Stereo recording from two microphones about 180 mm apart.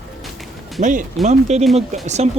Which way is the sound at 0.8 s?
45° right (ahead or behind).